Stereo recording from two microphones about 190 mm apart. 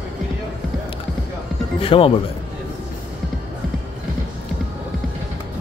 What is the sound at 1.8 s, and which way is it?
Speech, 30° left (ahead or behind).